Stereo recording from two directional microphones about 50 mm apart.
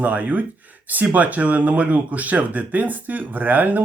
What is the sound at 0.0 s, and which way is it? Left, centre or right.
Speech, right.